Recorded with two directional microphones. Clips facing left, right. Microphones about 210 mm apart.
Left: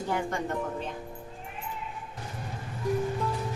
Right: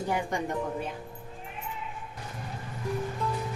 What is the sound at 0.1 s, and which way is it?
Speech, 15° right (ahead or behind).